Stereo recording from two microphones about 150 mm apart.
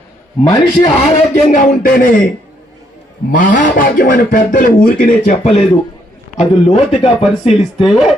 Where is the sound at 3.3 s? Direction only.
60° left (ahead or behind).